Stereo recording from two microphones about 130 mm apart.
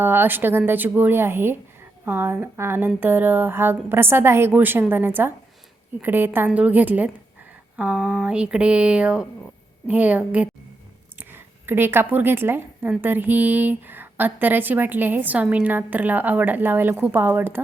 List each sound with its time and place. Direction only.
0.0 s a woman's voice: 15° right (ahead or behind)